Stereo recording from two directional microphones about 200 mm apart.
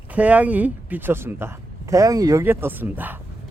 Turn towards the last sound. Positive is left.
turn(degrees=-10)  # may be behind; listen again after turning